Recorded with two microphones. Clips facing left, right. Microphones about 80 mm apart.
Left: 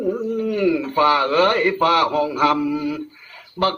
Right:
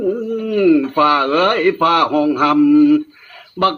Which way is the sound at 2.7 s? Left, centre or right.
Right.